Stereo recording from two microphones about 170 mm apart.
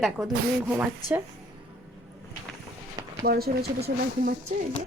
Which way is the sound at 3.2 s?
65° right (ahead or behind).